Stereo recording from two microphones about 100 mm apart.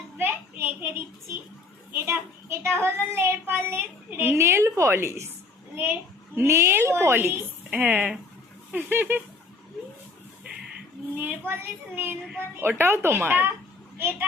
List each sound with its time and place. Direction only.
0.2 s a sound: 20° right (ahead or behind)
1.9 s a child's voice: 25° right (ahead or behind)
6.3 s a woman's voice: 25° right (ahead or behind)
11.2 s a woman's voice: 20° right (ahead or behind)